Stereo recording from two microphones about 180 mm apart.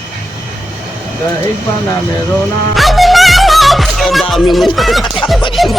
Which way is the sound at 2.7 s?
Centre (ahead or behind).